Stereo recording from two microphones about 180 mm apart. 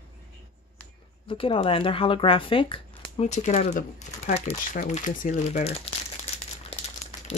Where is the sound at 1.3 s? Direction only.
30° left (ahead or behind).